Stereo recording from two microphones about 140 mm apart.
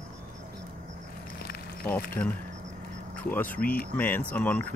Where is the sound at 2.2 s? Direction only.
30° left (ahead or behind).